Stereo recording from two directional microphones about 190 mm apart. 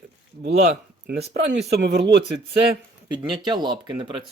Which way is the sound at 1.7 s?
60° right (ahead or behind).